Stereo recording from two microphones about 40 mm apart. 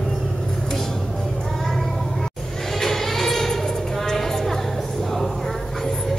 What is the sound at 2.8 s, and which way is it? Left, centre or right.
Music, centre.